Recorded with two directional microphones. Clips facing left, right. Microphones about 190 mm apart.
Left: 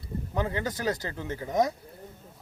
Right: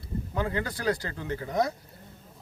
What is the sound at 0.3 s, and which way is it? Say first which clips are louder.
Speech: left 1 dB; 20° left (ahead or behind).